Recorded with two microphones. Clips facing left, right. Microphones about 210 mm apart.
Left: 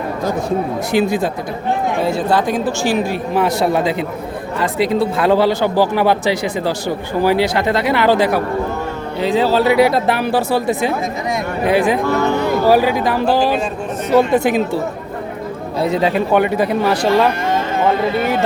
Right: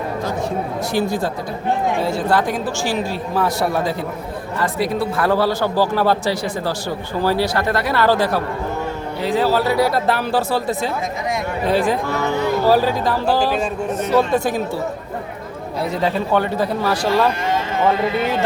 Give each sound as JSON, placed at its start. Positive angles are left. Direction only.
{"t": 0.9, "sound": "a man's voice", "side_deg": 20}
{"t": 15.8, "sound": "a man's voice", "side_deg": 20}